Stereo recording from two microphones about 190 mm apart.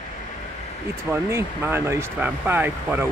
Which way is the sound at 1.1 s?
15° right (ahead or behind).